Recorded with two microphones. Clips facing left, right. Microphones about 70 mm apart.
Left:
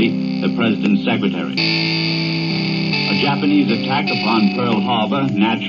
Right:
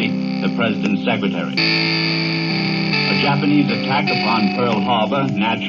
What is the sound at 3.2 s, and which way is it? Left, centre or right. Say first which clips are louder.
Music: left 1 dB; centre.